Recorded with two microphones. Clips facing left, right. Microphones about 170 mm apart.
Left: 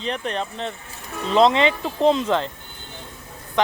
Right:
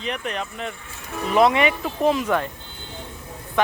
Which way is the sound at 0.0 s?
30° left (ahead or behind).